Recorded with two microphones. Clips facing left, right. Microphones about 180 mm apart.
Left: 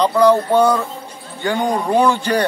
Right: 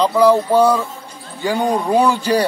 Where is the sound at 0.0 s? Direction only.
5° right (ahead or behind).